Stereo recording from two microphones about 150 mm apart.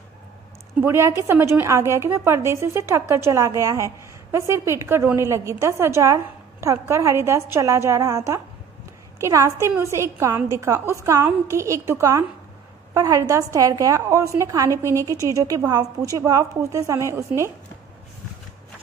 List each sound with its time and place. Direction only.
0.7 s a woman's voice: 15° right (ahead or behind)
9.2 s a woman's voice: 20° right (ahead or behind)